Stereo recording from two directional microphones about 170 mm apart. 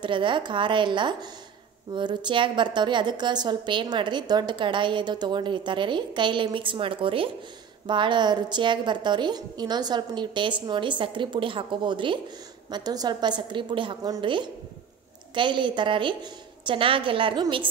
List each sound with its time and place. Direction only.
0.0 s a woman's voice: 30° right (ahead or behind)